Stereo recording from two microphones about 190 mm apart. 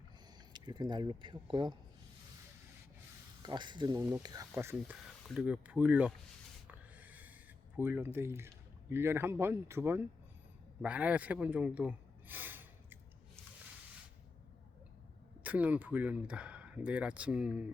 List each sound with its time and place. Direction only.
0.5 s speech: 25° right (ahead or behind)
3.4 s speech: 25° right (ahead or behind); by 6.1 s 5° right (ahead or behind)
6.7 s snort: 10° right (ahead or behind)
7.8 s speech: 10° right (ahead or behind)
15.4 s speech: 10° right (ahead or behind)